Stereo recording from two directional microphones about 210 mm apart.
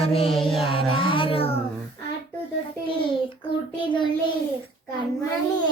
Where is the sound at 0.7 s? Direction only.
25° left (ahead or behind).